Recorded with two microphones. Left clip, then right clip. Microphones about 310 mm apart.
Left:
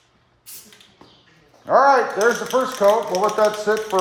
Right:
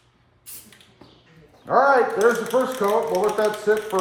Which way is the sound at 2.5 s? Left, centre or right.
Left.